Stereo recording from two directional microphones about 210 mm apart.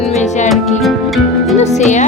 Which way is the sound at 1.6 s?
35° left (ahead or behind).